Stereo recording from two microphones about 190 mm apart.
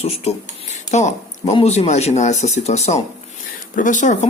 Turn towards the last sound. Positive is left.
turn(degrees=40)  # may be behind; listen again after turning